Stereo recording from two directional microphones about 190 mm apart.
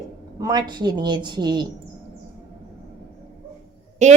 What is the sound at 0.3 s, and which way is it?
A woman's voice, 20° right (ahead or behind).